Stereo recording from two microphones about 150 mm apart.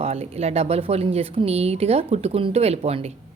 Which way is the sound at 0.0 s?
40° right (ahead or behind).